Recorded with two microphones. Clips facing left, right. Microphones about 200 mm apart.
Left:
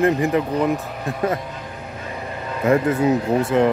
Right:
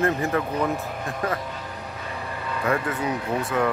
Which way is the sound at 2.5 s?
25° left (ahead or behind).